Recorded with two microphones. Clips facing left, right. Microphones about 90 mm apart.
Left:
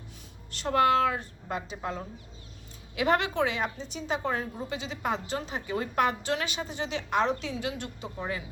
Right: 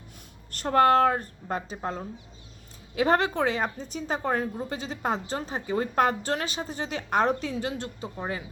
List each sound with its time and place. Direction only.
0.5 s speech: 45° right (ahead or behind)